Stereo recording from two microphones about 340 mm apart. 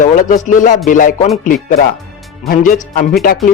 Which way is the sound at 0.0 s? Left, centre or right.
Left.